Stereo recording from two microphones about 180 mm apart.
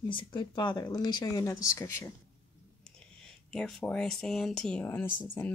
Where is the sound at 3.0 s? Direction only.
5° left (ahead or behind).